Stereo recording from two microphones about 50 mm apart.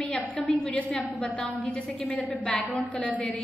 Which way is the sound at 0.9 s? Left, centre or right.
Centre.